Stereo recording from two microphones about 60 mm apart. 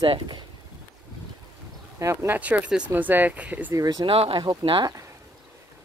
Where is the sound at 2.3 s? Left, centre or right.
Right.